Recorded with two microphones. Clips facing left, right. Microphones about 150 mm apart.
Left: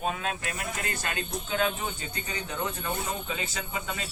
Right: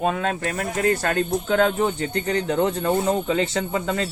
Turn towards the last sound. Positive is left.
turn(degrees=-55)  # may be behind; listen again after turning